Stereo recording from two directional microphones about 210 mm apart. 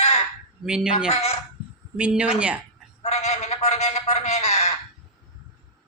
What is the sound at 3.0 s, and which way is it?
A man's voice, 30° left (ahead or behind).